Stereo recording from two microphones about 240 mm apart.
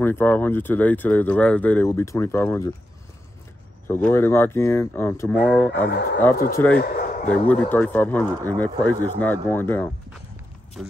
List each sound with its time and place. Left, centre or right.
0.0 s speech: centre
3.8 s speech: centre
5.9 s speech: left
6.5 s a man's voice: centre
6.8 s a sound: left
7.2 s speech: centre
10.8 s a man's voice: centre